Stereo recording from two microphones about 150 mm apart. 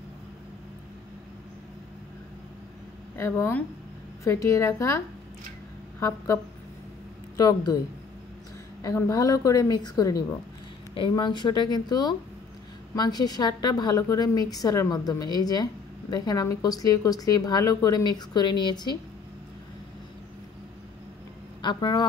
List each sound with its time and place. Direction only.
3.2 s a woman's voice: 15° left (ahead or behind)
8.8 s a woman's voice: 20° left (ahead or behind)
21.5 s a man's voice: 30° left (ahead or behind)